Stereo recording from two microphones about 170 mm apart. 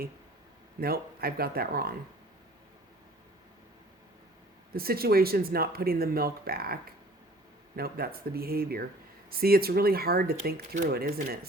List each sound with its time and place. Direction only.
0.8 s speech: 60° right (ahead or behind)
4.7 s speech: 60° right (ahead or behind)
7.8 s speech: 60° right (ahead or behind)